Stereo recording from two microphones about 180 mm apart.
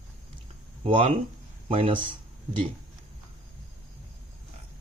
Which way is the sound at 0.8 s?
30° right (ahead or behind).